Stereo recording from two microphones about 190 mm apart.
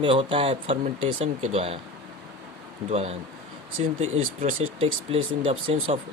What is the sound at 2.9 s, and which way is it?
Speech, 35° right (ahead or behind).